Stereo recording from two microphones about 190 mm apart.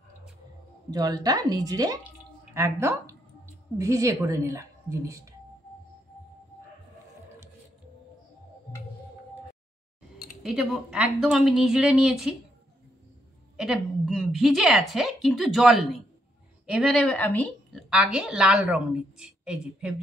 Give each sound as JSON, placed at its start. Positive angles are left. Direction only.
{"t": 0.8, "sound": "a woman's voice", "side_deg": -20}
{"t": 10.4, "sound": "a woman's voice", "side_deg": -5}
{"t": 13.6, "sound": "a woman's voice", "side_deg": 0}
{"t": 17.8, "sound": "a woman's voice", "side_deg": -5}